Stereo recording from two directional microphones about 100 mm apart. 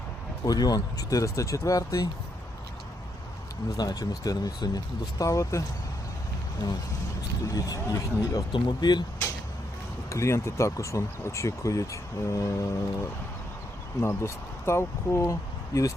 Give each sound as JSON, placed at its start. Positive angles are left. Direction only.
{"t": 0.4, "sound": "speech", "side_deg": 40}
{"t": 3.8, "sound": "speech", "side_deg": 40}
{"t": 6.6, "sound": "speech", "side_deg": 45}
{"t": 8.5, "sound": "speech", "side_deg": 45}
{"t": 10.1, "sound": "speech", "side_deg": 30}
{"t": 14.0, "sound": "speech", "side_deg": 30}